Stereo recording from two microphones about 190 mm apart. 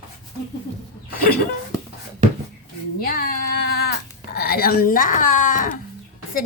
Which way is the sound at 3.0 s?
50° left (ahead or behind).